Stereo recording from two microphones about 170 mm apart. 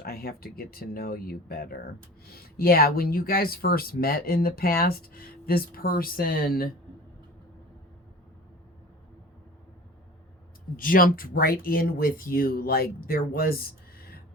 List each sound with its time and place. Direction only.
0.0 s speech: 65° left (ahead or behind)
10.8 s speech: 55° left (ahead or behind)